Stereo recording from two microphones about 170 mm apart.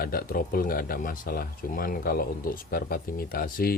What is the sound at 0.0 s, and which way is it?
Speech, 60° left (ahead or behind).